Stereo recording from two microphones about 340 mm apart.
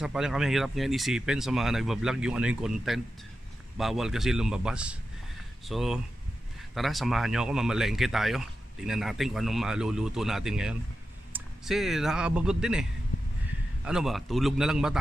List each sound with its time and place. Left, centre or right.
0.0 s speech: centre
13.8 s speech: centre